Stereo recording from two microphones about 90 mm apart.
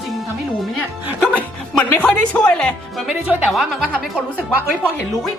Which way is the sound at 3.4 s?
Centre (ahead or behind).